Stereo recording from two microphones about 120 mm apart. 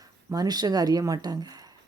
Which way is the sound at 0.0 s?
30° right (ahead or behind).